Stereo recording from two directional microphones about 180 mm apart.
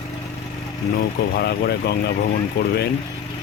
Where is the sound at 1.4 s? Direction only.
65° left (ahead or behind).